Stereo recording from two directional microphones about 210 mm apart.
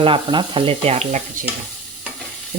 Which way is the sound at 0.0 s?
25° right (ahead or behind).